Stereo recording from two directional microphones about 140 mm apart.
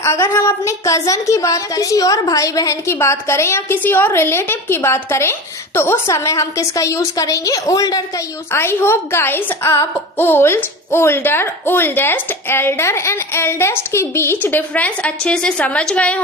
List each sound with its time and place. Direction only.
0.0 s a woman's voice: 20° left (ahead or behind)